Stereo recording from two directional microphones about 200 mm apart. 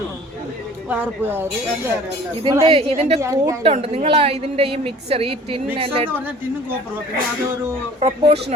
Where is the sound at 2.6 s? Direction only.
30° right (ahead or behind).